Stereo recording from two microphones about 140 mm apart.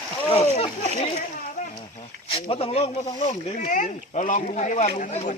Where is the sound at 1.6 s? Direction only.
65° left (ahead or behind).